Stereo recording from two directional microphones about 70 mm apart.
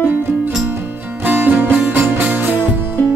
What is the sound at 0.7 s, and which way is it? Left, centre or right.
Music, right.